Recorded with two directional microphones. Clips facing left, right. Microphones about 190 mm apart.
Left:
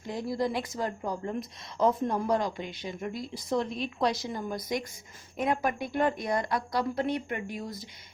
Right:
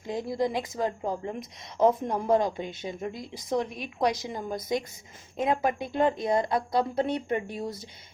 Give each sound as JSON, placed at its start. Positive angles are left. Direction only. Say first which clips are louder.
{"t": 0.0, "sound": "a woman's voice", "louder": "right 2 dB", "side_deg": -20}